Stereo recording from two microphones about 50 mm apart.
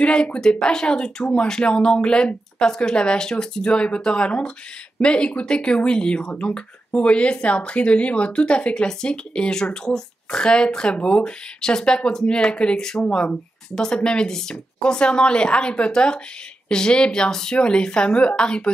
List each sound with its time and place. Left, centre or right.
0.0 s speech: left